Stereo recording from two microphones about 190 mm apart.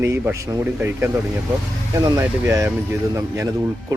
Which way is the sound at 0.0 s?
15° right (ahead or behind).